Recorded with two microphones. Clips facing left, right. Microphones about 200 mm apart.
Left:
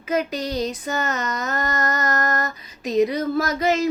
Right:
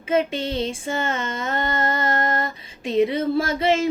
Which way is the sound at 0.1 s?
25° right (ahead or behind).